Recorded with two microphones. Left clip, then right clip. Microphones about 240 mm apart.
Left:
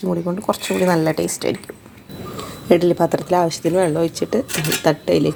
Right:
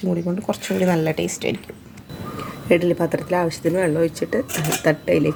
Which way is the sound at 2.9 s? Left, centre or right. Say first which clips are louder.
Left 4 dB; centre.